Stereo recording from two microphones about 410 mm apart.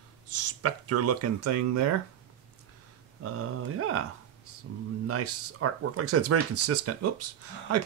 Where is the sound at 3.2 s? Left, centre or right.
Right.